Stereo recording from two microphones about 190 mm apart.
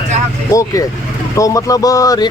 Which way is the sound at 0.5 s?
15° left (ahead or behind).